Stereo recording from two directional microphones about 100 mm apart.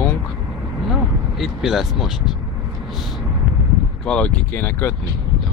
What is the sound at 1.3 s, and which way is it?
Speech, centre (ahead or behind).